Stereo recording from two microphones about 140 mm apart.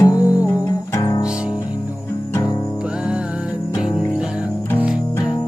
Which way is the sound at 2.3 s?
25° left (ahead or behind).